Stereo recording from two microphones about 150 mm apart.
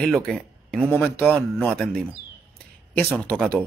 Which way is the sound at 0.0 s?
5° left (ahead or behind).